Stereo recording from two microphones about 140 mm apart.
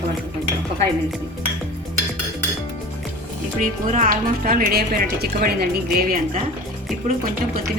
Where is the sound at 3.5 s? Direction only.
65° right (ahead or behind); by 6.2 s 90° right.